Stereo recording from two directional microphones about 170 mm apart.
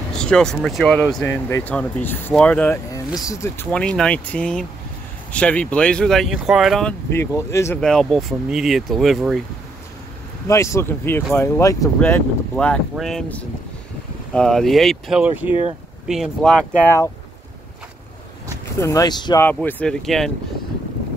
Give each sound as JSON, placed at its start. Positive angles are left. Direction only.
{"t": 0.2, "sound": "speech", "side_deg": 5}
{"t": 3.7, "sound": "speech", "side_deg": 5}
{"t": 7.2, "sound": "speech", "side_deg": 15}
{"t": 7.8, "sound": "speech", "side_deg": 5}
{"t": 10.5, "sound": "speech", "side_deg": 15}
{"t": 18.8, "sound": "speech", "side_deg": 20}
{"t": 19.4, "sound": "speech", "side_deg": 10}